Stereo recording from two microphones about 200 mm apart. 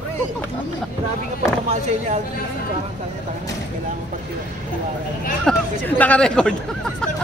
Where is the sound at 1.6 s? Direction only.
35° right (ahead or behind).